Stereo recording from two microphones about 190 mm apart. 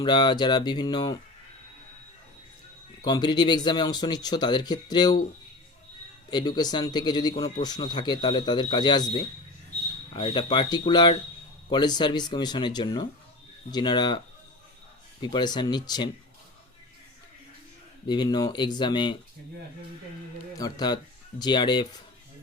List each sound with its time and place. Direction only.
0.0 s speech: 25° left (ahead or behind)
3.0 s speech: 20° left (ahead or behind)
6.3 s speech: 20° left (ahead or behind)
15.2 s speech: 20° left (ahead or behind)
18.0 s speech: 25° left (ahead or behind)
20.6 s speech: 20° left (ahead or behind)